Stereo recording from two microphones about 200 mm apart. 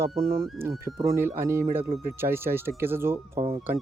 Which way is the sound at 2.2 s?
10° right (ahead or behind).